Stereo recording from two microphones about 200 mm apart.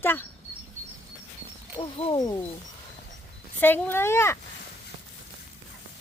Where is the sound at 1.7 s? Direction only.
25° left (ahead or behind).